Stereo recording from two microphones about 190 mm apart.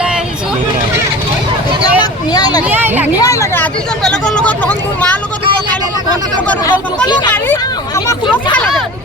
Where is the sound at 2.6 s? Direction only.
10° right (ahead or behind).